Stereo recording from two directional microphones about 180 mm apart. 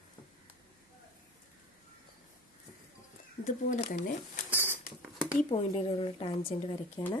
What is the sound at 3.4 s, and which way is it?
Speech, 45° left (ahead or behind).